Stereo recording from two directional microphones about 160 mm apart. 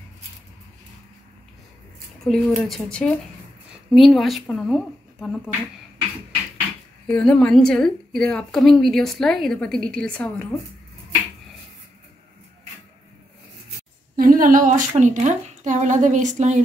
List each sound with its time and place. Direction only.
2.2 s a woman's voice: centre (ahead or behind)
7.1 s a woman's voice: 5° left (ahead or behind)
14.1 s a woman's voice: 60° right (ahead or behind)